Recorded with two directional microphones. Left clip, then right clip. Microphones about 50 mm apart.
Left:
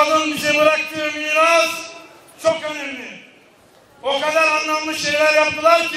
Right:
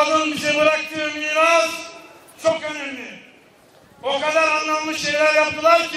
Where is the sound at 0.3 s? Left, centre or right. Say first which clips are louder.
Left 2 dB; centre.